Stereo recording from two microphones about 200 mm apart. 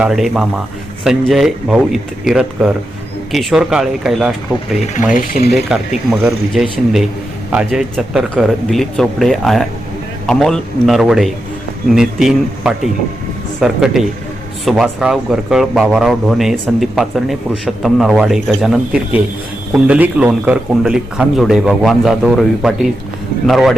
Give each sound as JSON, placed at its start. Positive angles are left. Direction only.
{"t": 0.0, "sound": "speech", "side_deg": 0}
{"t": 5.1, "sound": "speech", "side_deg": 45}
{"t": 5.5, "sound": "speech", "side_deg": 0}